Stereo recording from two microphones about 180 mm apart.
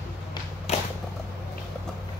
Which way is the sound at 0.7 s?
35° left (ahead or behind).